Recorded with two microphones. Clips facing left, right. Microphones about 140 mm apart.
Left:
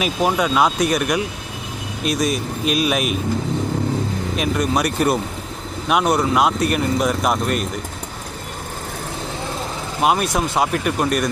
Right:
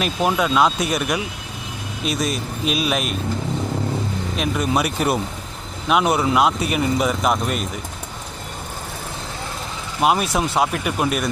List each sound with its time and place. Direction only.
0.0 s speech: 5° left (ahead or behind)
4.4 s speech: centre (ahead or behind)
10.0 s speech: centre (ahead or behind)